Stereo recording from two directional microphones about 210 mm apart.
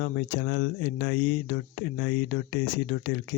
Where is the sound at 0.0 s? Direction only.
60° left (ahead or behind).